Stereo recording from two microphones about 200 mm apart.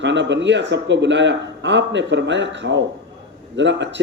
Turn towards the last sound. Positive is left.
turn(degrees=-65)  # may be behind; listen again after turning